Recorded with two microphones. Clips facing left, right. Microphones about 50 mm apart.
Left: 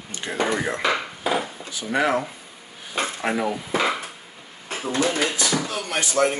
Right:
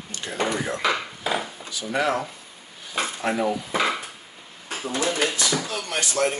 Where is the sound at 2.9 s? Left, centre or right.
Left.